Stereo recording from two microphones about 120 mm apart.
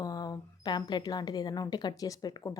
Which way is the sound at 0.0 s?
30° left (ahead or behind).